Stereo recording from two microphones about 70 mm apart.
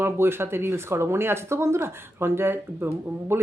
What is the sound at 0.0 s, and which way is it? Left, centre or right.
Speech, right.